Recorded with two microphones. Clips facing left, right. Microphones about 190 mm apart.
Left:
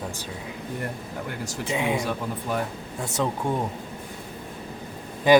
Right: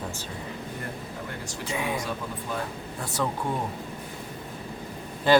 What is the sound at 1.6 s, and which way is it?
Speech, 20° left (ahead or behind).